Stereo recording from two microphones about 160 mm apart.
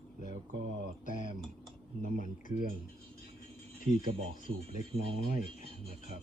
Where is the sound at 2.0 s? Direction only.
55° right (ahead or behind).